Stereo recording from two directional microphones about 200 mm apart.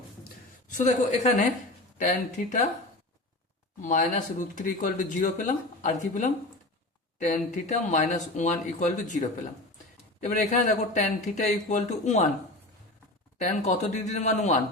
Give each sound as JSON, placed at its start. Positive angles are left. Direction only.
{"t": 0.7, "sound": "speech", "side_deg": 35}
{"t": 3.8, "sound": "speech", "side_deg": 40}
{"t": 13.4, "sound": "speech", "side_deg": 35}